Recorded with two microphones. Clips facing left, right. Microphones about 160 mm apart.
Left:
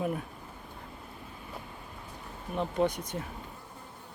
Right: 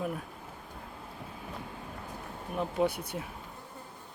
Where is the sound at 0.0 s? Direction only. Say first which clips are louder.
Left 3 dB; centre (ahead or behind).